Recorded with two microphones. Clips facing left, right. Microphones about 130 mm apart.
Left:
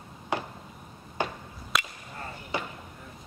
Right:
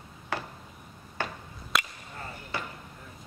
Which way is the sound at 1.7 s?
Centre (ahead or behind).